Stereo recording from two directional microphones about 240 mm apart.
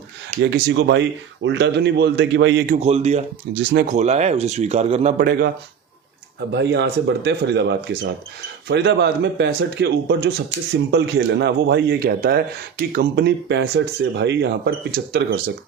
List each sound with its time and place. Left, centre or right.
0.5 s speech: right
2.8 s speech: right
3.5 s speech: right
3.9 s speech: right
6.5 s speech: right